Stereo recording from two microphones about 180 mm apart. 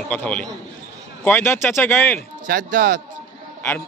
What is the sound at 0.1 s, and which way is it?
A man's voice, 5° left (ahead or behind).